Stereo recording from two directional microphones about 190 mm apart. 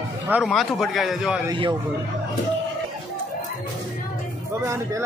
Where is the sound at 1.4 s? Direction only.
25° right (ahead or behind).